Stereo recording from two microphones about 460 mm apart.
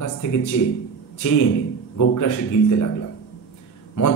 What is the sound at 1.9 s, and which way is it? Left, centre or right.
Speech, left.